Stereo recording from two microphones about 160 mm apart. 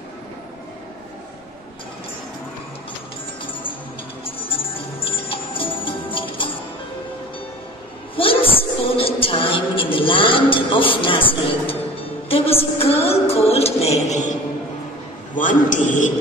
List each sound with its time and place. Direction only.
4.5 s jingle bell: 35° left (ahead or behind)
8.2 s music: 35° left (ahead or behind)
8.9 s a sound: 35° left (ahead or behind)
12.0 s music: 35° left (ahead or behind)
15.3 s a man's voice: 55° left (ahead or behind)